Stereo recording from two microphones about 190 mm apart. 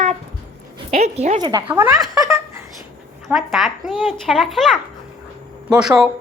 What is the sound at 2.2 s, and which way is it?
Laughter, 15° right (ahead or behind).